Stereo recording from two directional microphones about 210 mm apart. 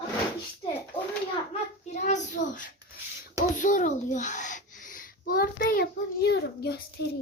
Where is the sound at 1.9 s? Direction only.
35° left (ahead or behind).